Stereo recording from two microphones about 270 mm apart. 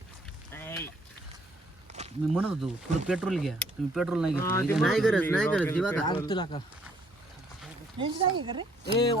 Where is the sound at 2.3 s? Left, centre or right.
Centre.